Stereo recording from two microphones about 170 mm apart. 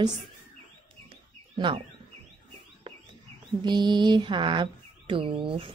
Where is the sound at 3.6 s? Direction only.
25° right (ahead or behind).